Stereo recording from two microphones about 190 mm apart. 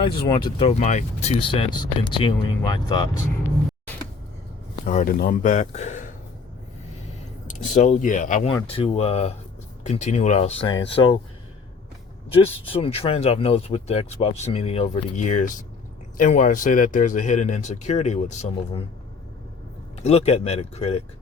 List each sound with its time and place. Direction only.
0.6 s speech: 35° left (ahead or behind)
4.9 s speech: 45° left (ahead or behind)
7.8 s speech: 40° left (ahead or behind)
12.3 s speech: 30° left (ahead or behind)
20.0 s speech: 35° left (ahead or behind)